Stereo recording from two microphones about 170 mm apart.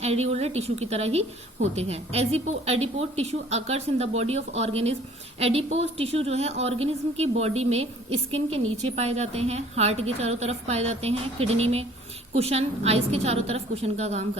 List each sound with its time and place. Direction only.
0.0 s a woman's voice: 40° right (ahead or behind)